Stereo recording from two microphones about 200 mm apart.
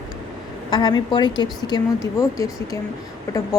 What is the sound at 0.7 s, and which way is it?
Speech, 20° left (ahead or behind).